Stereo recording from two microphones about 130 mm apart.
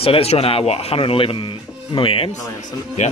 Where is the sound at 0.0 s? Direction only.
50° left (ahead or behind).